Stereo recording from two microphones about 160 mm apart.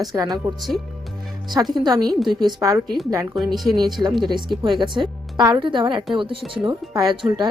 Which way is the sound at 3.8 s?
25° right (ahead or behind).